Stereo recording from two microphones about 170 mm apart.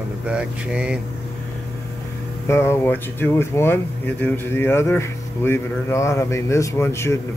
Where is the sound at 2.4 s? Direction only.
15° left (ahead or behind).